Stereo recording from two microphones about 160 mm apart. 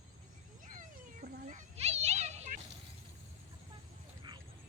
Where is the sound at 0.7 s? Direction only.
55° right (ahead or behind).